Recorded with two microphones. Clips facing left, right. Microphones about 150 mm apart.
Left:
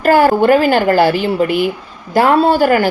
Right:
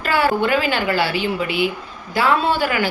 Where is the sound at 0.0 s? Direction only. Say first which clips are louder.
Left 8 dB; 45° left (ahead or behind).